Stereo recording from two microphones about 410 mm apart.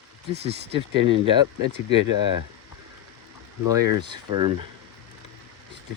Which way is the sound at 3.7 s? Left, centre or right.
Centre.